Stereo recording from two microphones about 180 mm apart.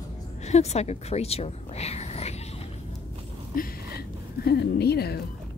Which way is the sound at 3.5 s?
55° left (ahead or behind).